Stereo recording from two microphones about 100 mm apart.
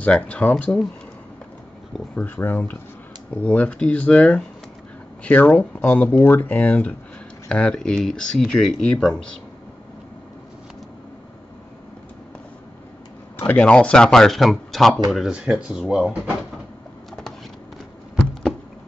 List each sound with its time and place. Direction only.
0.0 s speech: 15° left (ahead or behind)
2.1 s speech: 20° left (ahead or behind)
13.4 s speech: 15° left (ahead or behind); by 16.2 s 10° right (ahead or behind)